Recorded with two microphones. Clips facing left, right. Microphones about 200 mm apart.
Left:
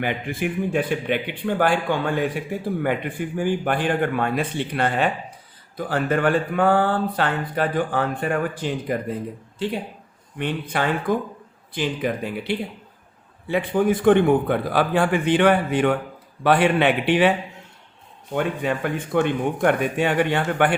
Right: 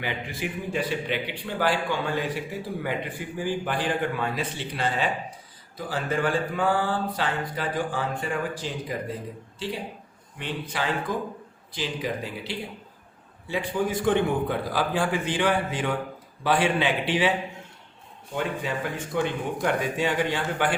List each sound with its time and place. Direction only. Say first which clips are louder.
0.0 s a man's voice: left 6 dB; 55° left (ahead or behind)
10.3 s a man's voice: left 6 dB; 55° left (ahead or behind)
18.3 s a man's voice: left 5 dB; 55° left (ahead or behind)